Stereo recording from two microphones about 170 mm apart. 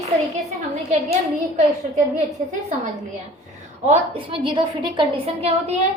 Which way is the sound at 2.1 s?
45° right (ahead or behind).